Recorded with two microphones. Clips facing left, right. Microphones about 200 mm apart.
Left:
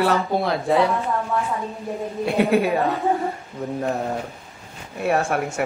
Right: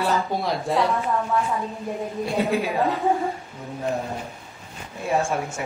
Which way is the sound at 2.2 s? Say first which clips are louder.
Left 5 dB; 60° left (ahead or behind).